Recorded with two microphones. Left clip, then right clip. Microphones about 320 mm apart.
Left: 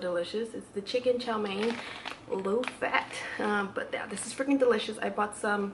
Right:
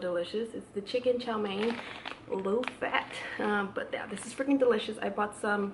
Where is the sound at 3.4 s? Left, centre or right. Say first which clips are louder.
Left 1 dB; centre.